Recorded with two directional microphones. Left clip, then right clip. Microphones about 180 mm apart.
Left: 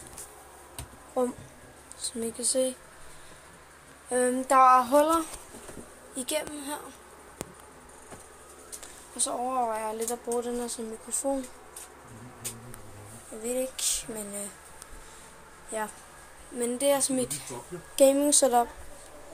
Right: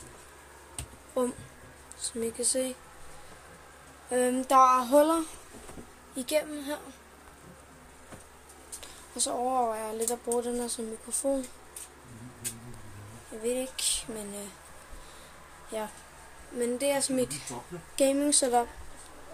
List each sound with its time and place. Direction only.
2.0 s speech: 10° right (ahead or behind)
4.1 s speech: 15° right (ahead or behind)
6.1 s speech: 10° right (ahead or behind)
9.1 s speech: 25° right (ahead or behind)
13.4 s speech: 10° right (ahead or behind)
16.5 s speech: 10° right (ahead or behind)